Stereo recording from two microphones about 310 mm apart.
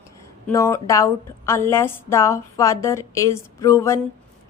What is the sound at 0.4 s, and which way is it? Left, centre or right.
A woman's voice, centre.